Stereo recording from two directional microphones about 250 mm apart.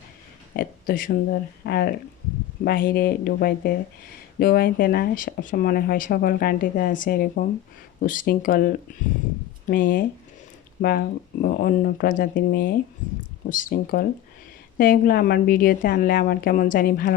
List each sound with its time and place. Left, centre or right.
0.5 s speech: left